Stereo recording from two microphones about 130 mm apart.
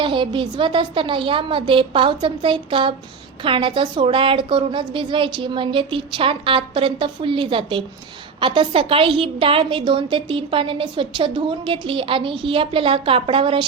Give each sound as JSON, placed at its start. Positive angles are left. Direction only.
{"t": 0.0, "sound": "a woman's voice", "side_deg": -40}